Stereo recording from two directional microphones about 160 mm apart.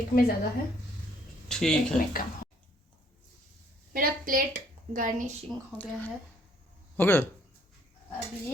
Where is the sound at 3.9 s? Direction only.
60° right (ahead or behind).